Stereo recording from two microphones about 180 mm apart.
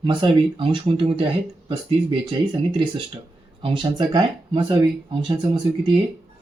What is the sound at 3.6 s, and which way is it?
A man's voice, 30° right (ahead or behind).